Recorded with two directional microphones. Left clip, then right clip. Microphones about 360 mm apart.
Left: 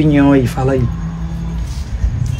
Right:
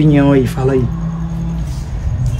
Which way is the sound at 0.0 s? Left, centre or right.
Centre.